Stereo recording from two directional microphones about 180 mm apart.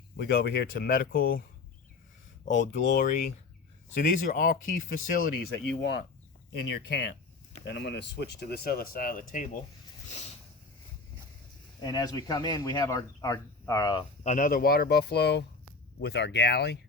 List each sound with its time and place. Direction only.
0.2 s speech: 60° left (ahead or behind)
3.0 s speech: 50° left (ahead or behind)
5.8 s speech: 75° left (ahead or behind); by 9.5 s 50° left (ahead or behind)
11.8 s speech: 20° left (ahead or behind)
14.3 s speech: 45° left (ahead or behind); by 16.7 s 65° left (ahead or behind)